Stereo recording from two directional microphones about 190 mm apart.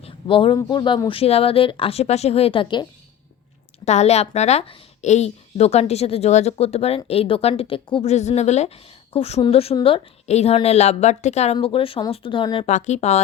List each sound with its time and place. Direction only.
0.0 s speech: 30° left (ahead or behind)
3.8 s a woman's voice: 35° left (ahead or behind)